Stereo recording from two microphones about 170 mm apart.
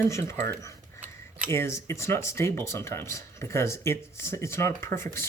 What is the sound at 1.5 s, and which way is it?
Speech, 15° left (ahead or behind).